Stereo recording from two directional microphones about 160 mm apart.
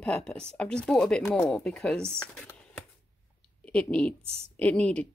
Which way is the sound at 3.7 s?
5° left (ahead or behind).